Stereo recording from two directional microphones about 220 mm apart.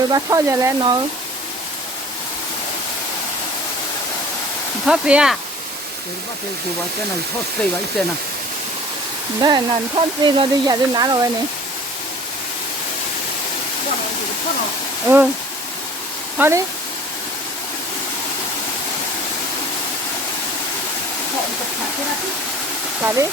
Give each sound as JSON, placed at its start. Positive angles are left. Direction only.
{"t": 0.1, "sound": "speech", "side_deg": -15}
{"t": 4.9, "sound": "speech", "side_deg": -5}
{"t": 7.6, "sound": "speech", "side_deg": 5}
{"t": 9.4, "sound": "speech", "side_deg": -20}
{"t": 15.0, "sound": "speech", "side_deg": -10}
{"t": 16.4, "sound": "speech", "side_deg": -10}
{"t": 23.0, "sound": "speech", "side_deg": -15}